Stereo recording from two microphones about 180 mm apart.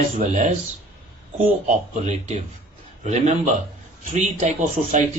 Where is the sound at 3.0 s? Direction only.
40° right (ahead or behind).